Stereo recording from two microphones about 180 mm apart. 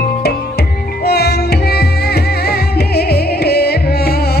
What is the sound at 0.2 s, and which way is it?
Music, 60° left (ahead or behind).